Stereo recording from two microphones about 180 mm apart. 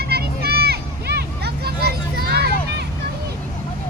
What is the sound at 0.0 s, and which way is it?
Vehicle, 60° right (ahead or behind).